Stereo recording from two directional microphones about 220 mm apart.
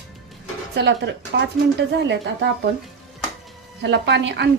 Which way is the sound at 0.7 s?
50° right (ahead or behind).